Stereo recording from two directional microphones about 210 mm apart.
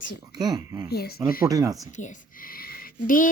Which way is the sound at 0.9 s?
45° left (ahead or behind).